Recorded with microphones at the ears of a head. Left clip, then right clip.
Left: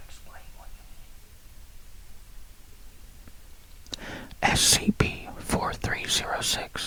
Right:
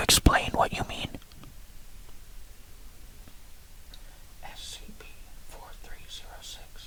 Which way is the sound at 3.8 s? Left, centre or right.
Left.